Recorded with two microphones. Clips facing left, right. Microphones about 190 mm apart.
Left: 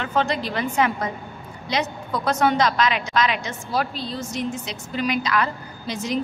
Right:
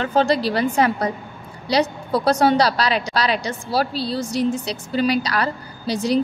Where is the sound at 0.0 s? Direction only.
35° right (ahead or behind).